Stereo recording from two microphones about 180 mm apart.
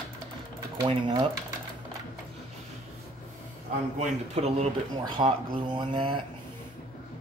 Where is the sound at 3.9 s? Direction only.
40° right (ahead or behind).